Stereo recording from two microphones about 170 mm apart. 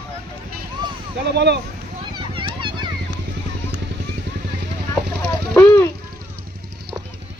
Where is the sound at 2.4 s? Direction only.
30° right (ahead or behind).